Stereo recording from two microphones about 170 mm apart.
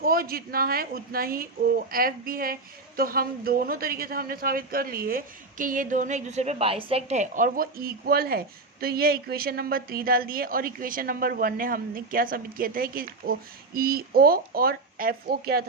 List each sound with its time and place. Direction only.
0.0 s a woman's voice: 60° right (ahead or behind)